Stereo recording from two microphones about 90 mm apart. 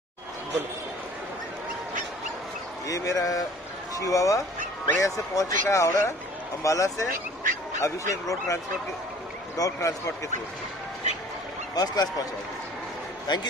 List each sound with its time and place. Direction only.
2.9 s speech: 40° left (ahead or behind)
9.6 s speech: 35° left (ahead or behind)
11.7 s speech: 45° left (ahead or behind)
13.3 s a man's voice: 55° left (ahead or behind)